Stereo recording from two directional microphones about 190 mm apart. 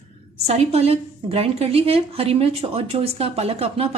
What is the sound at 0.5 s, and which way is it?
A woman's voice, 35° right (ahead or behind).